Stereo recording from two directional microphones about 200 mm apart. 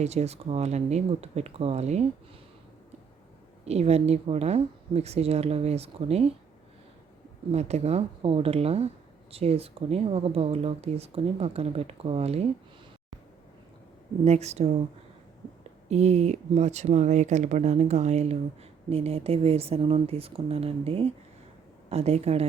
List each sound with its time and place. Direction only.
0.0 s a woman's voice: 35° right (ahead or behind)
3.7 s a woman's voice: 30° right (ahead or behind)
7.5 s a woman's voice: 35° right (ahead or behind)
14.3 s a woman's voice: 35° right (ahead or behind)
15.9 s a woman's voice: 35° right (ahead or behind)